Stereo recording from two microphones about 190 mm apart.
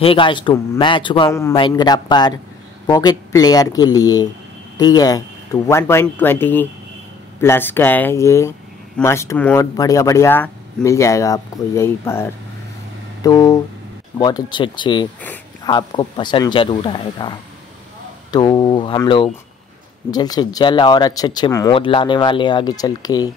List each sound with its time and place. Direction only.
0.0 s speech: 25° left (ahead or behind)